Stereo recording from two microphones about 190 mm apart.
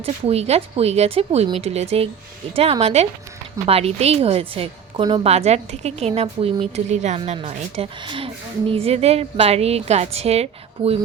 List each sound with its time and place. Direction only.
0.0 s a woman's voice: 35° right (ahead or behind)